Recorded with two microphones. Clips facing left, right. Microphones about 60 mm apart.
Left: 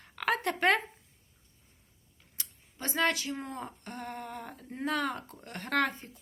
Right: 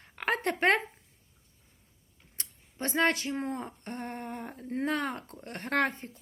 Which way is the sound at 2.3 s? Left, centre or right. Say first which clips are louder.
Right 4 dB; right.